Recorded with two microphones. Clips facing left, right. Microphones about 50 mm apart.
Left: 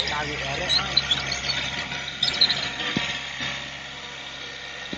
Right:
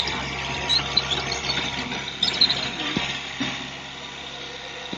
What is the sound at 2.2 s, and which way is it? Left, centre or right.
Mechanisms, centre.